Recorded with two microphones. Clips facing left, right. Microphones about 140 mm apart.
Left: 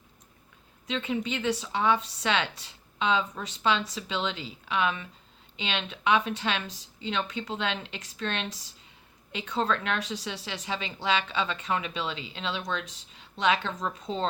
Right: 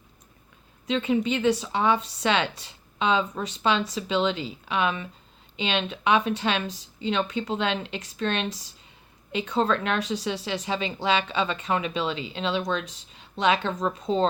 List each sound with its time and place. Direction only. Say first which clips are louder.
0.9 s a woman's voice: right 6 dB; 25° right (ahead or behind)
13.7 s speech: right 6 dB; 35° right (ahead or behind)